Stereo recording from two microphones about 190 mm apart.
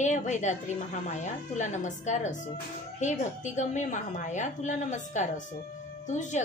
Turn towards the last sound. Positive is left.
turn(degrees=40)  # may be behind; listen again after turning